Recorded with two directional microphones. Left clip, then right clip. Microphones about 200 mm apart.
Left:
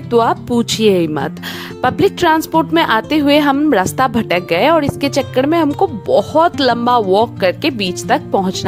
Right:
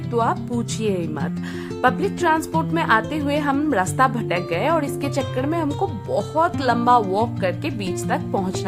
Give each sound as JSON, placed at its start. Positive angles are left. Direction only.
{"t": 0.1, "sound": "speech", "side_deg": 45}